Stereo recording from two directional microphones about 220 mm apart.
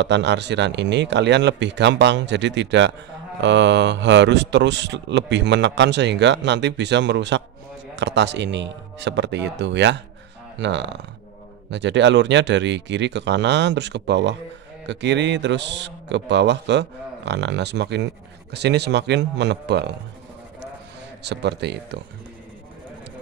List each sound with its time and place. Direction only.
0.0 s a man's voice: 50° right (ahead or behind)
21.2 s a man's voice: 50° right (ahead or behind)